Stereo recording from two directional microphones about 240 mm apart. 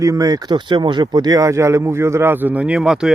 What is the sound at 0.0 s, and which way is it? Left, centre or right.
Speech, centre.